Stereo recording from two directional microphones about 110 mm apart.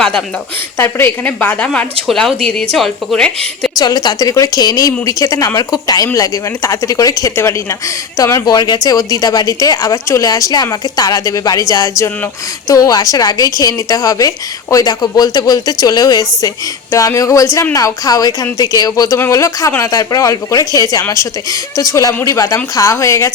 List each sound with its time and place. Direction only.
0.8 s a woman's voice: 20° left (ahead or behind)
3.8 s a woman's voice: 35° left (ahead or behind)